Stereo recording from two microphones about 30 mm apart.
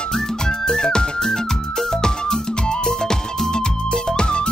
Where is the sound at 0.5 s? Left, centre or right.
Left.